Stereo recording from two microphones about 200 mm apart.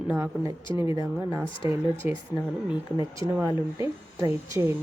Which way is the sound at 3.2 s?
15° right (ahead or behind).